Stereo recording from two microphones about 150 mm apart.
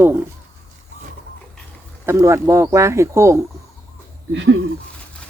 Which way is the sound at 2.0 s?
20° right (ahead or behind).